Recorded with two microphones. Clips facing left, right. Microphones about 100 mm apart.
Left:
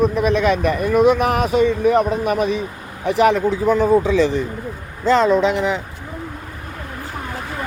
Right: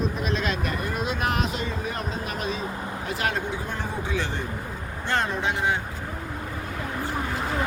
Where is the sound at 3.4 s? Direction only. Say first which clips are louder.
Left 15 dB; 90° left.